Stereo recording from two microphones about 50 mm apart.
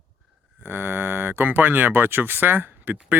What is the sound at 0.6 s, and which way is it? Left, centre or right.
Speech, right.